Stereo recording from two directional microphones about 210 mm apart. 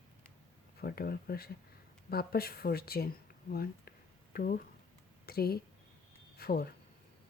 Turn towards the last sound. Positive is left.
turn(degrees=45)  # may be behind; listen again after turning